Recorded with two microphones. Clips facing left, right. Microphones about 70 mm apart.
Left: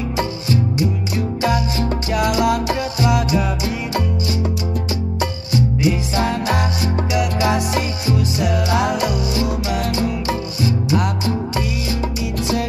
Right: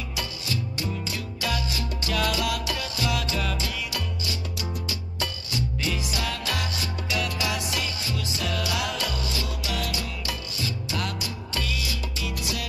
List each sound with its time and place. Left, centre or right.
0.2 s music: left
5.2 s music: left